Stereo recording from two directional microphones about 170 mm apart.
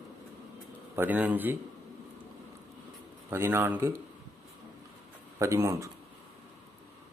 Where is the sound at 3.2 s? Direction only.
15° right (ahead or behind).